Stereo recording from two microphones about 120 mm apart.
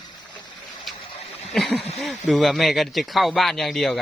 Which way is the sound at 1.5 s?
5° left (ahead or behind).